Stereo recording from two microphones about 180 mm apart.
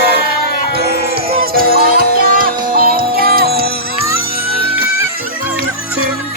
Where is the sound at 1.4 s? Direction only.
55° right (ahead or behind).